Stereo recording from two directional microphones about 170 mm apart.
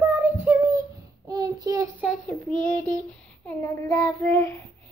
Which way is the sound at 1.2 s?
25° right (ahead or behind).